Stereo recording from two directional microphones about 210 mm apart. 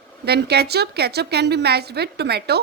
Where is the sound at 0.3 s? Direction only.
50° right (ahead or behind).